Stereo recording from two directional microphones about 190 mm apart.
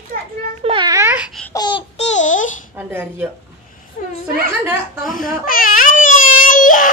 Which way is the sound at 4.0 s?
45° left (ahead or behind).